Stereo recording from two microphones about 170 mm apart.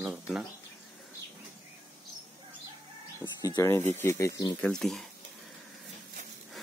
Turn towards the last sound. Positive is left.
turn(degrees=0)  # may be behind; listen again after turning